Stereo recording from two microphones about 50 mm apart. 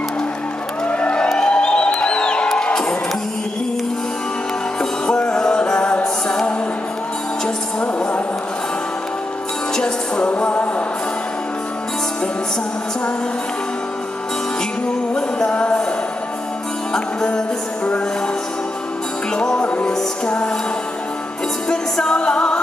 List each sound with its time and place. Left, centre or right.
0.8 s vehicle: left
1.3 s music: centre
5.0 s music: centre
9.8 s music: centre
15.1 s jingle bell: centre
16.9 s music: centre
19.3 s music: centre
21.6 s music: centre